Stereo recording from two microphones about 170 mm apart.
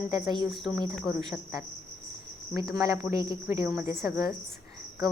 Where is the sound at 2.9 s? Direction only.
20° right (ahead or behind).